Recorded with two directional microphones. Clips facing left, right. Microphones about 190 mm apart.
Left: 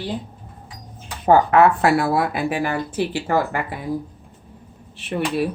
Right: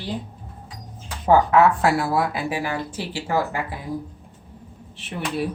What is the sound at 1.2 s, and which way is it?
A woman's voice, 60° left (ahead or behind).